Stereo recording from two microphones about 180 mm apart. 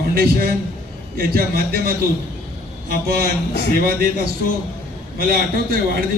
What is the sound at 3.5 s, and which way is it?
Speech, 65° left (ahead or behind).